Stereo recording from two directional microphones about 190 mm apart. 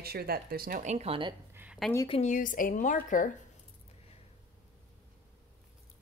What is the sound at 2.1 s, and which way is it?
Speech, 40° left (ahead or behind).